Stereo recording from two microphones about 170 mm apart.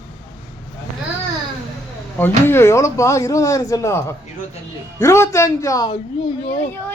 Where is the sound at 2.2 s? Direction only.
15° left (ahead or behind).